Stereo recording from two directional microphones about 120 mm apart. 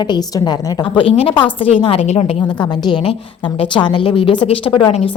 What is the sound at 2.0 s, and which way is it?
Speech, 65° left (ahead or behind).